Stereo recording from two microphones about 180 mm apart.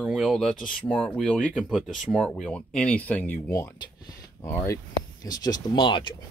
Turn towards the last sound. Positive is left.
turn(degrees=25)  # may be behind; listen again after turning